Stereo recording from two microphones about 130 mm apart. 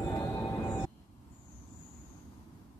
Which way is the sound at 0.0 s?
25° left (ahead or behind).